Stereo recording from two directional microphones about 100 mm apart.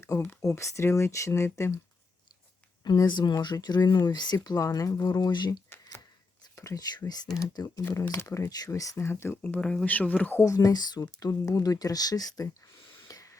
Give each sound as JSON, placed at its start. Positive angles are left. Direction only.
{"t": 0.0, "sound": "speech", "side_deg": 30}
{"t": 2.8, "sound": "speech", "side_deg": 45}
{"t": 5.6, "sound": "squish", "side_deg": 25}
{"t": 6.6, "sound": "speech", "side_deg": 35}
{"t": 8.1, "sound": "speech", "side_deg": 25}
{"t": 9.4, "sound": "speech", "side_deg": 10}
{"t": 10.4, "sound": "speech", "side_deg": 35}
{"t": 11.2, "sound": "speech", "side_deg": 30}
{"t": 13.1, "sound": "spray", "side_deg": 35}